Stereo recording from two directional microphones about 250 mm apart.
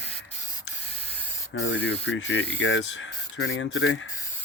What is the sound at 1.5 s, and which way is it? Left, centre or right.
Speech, left.